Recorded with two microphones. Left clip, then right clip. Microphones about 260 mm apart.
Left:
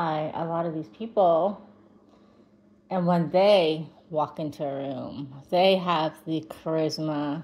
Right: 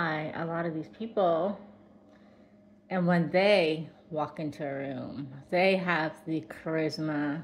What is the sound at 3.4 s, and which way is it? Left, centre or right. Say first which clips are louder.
Speech: left 5 dB; left.